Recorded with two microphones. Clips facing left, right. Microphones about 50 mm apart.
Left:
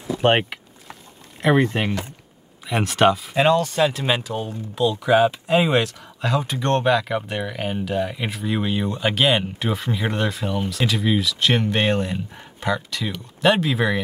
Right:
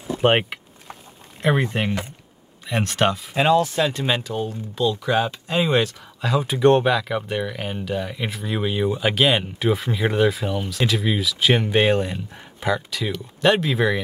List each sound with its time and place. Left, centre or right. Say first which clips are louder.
0.2 s vehicle: even; centre
1.4 s speech: left 3 dB; centre
6.4 s speech: right 7 dB; centre